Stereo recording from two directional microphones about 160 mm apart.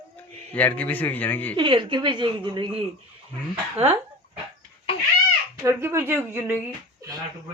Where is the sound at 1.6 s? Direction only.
30° right (ahead or behind).